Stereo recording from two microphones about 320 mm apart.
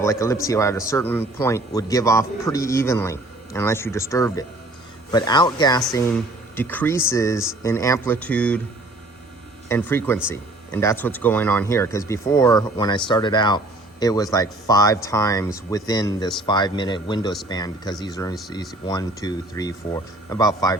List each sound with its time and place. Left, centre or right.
0.0 s speech: centre
9.6 s speech: centre